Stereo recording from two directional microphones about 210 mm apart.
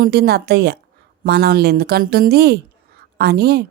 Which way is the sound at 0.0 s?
50° right (ahead or behind).